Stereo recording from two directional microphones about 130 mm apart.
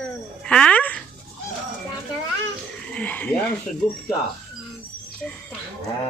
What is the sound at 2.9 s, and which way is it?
Speech, 10° left (ahead or behind).